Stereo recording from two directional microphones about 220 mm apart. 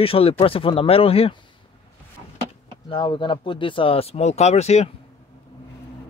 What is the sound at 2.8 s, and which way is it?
Speech, 20° left (ahead or behind).